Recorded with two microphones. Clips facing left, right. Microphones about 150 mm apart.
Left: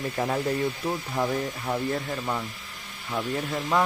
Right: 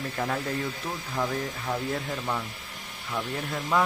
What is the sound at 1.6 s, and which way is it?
Speech, 10° left (ahead or behind).